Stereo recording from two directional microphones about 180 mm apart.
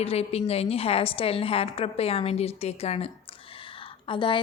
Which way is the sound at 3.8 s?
30° left (ahead or behind).